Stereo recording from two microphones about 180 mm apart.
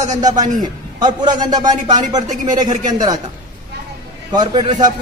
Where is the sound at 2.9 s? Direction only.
20° right (ahead or behind).